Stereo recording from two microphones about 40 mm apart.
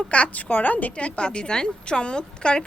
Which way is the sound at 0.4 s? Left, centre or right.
Left.